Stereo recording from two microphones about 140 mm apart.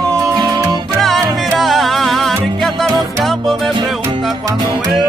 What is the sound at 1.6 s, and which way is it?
Music, centre (ahead or behind).